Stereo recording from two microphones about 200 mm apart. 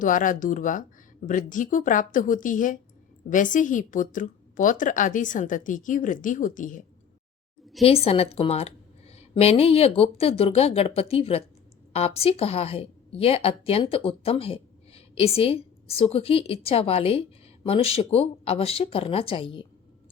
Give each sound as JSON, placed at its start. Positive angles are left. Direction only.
{"t": 0.0, "sound": "a woman's voice", "side_deg": 40}
{"t": 7.8, "sound": "a woman's voice", "side_deg": 30}